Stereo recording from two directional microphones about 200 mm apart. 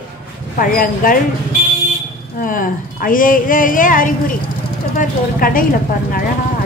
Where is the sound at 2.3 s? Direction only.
45° left (ahead or behind).